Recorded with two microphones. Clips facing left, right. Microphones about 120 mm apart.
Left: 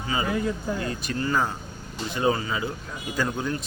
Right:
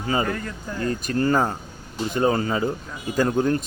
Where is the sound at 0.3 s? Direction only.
10° left (ahead or behind).